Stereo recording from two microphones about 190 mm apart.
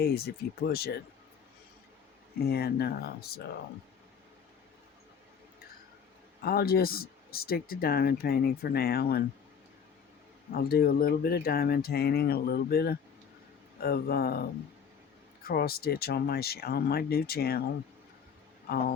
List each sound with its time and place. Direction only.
0.0 s speech: 55° left (ahead or behind)
2.4 s speech: 55° left (ahead or behind)
6.4 s speech: 50° left (ahead or behind)
10.5 s speech: 50° left (ahead or behind)
15.4 s speech: 55° left (ahead or behind)